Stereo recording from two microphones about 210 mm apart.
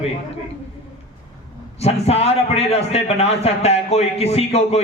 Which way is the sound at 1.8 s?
30° left (ahead or behind).